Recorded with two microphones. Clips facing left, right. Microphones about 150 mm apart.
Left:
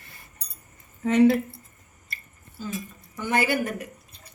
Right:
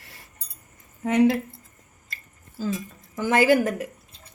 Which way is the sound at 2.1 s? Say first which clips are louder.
Right 1 dB; 90° right.